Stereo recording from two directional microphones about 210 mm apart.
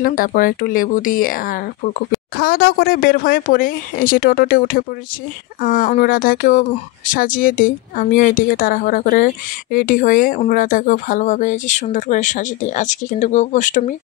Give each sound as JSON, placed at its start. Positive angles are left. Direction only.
{"t": 0.0, "sound": "speech", "side_deg": 40}